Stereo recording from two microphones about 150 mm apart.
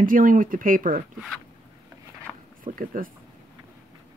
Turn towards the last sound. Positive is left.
turn(degrees=-65)  # may be behind; listen again after turning